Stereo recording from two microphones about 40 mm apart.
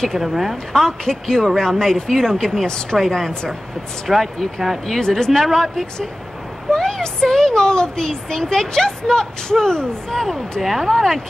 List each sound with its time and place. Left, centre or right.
0.2 s speech: centre
0.7 s speech: centre
10.6 s speech: centre